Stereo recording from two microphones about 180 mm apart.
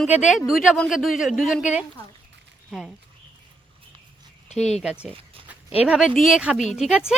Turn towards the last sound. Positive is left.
turn(degrees=-5)  # may be behind; listen again after turning